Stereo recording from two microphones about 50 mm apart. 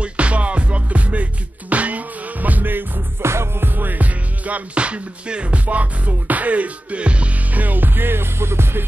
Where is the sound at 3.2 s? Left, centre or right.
Right.